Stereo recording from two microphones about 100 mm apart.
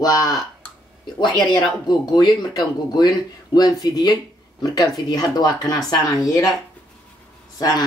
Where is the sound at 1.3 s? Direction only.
Centre (ahead or behind).